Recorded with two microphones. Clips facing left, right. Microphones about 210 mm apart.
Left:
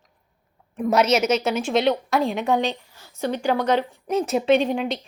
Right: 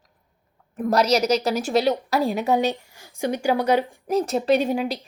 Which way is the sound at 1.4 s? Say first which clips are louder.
Even; centre (ahead or behind).